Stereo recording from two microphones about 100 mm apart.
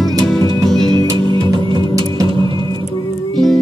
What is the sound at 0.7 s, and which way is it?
Music, 5° left (ahead or behind).